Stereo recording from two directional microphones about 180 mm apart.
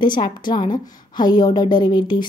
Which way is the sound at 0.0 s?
25° left (ahead or behind).